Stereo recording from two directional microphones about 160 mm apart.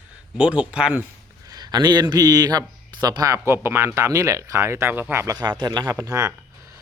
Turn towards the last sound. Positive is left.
turn(degrees=-20)  # may be behind; listen again after turning